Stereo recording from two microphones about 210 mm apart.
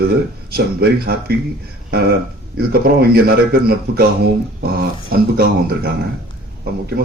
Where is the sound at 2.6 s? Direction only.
45° right (ahead or behind).